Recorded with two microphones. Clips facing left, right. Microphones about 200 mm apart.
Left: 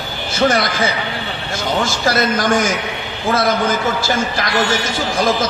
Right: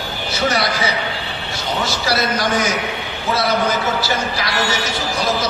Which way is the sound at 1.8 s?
50° left (ahead or behind).